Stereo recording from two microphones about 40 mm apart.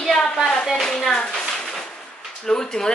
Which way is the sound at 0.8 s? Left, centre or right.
Centre.